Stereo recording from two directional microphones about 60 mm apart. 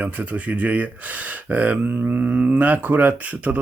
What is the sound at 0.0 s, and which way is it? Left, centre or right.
Speech, right.